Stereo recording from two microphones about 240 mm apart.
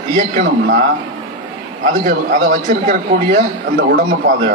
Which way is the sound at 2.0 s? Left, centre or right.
Right.